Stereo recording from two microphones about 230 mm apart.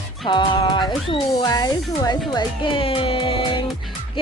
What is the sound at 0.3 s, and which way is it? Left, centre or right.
Speech, centre.